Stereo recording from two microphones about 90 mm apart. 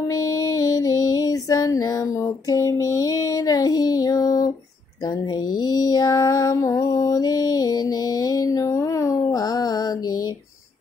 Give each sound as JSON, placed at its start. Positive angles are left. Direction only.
{"t": 0.1, "sound": "music", "side_deg": 45}
{"t": 2.4, "sound": "child singing", "side_deg": 40}
{"t": 5.0, "sound": "female singing", "side_deg": 50}
{"t": 9.3, "sound": "mantra", "side_deg": 45}